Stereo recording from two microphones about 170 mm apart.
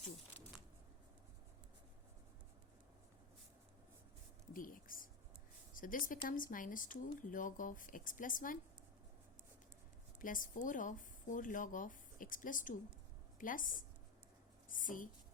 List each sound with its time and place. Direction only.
4.5 s a sound: 55° left (ahead or behind)
5.7 s speech: 55° left (ahead or behind)
10.2 s a woman's voice: 50° left (ahead or behind)